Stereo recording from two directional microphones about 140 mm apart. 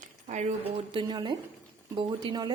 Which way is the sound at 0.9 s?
35° right (ahead or behind).